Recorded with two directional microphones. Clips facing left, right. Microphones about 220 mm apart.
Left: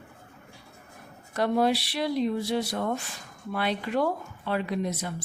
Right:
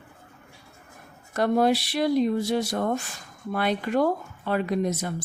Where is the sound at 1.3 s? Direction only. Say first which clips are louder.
Right 3 dB; 45° right (ahead or behind).